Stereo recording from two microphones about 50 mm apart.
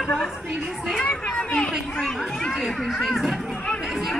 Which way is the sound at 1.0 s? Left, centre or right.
Left.